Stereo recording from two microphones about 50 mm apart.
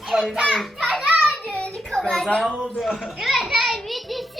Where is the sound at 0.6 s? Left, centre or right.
Centre.